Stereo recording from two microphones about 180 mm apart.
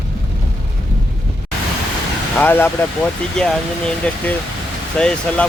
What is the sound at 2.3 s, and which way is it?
Speech, 10° left (ahead or behind).